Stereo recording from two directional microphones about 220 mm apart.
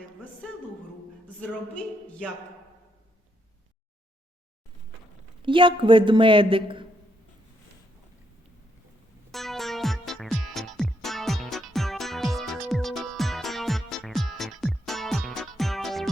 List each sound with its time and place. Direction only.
1.4 s speech: 5° left (ahead or behind)
5.4 s speech: 20° right (ahead or behind)
9.3 s music: centre (ahead or behind)